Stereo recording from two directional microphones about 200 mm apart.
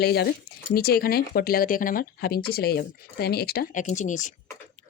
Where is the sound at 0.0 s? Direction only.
50° left (ahead or behind).